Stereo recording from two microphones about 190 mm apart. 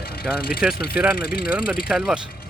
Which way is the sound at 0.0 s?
55° left (ahead or behind).